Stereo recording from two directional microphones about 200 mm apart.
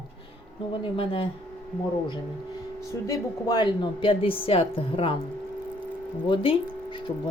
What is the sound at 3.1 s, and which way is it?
Speech, 20° left (ahead or behind).